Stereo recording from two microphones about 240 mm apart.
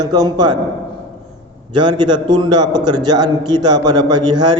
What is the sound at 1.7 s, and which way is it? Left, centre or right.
A man's voice, centre.